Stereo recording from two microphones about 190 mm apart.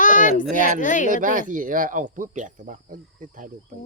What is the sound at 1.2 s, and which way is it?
Speech, 45° right (ahead or behind).